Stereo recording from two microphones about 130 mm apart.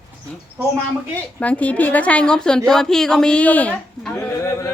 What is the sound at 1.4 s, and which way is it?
A woman's voice, 10° left (ahead or behind).